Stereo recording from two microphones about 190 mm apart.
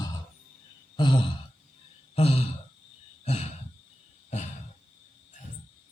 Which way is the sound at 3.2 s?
35° left (ahead or behind).